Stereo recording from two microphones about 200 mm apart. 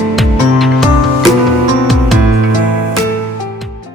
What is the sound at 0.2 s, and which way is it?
Music, centre (ahead or behind).